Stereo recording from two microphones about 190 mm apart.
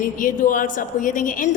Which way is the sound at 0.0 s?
45° left (ahead or behind).